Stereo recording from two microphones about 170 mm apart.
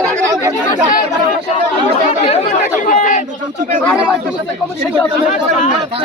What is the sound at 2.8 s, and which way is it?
Chatter, 50° left (ahead or behind).